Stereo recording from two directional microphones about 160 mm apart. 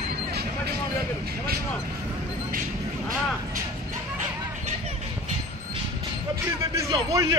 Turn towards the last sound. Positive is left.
turn(degrees=-20)  # may be behind; listen again after turning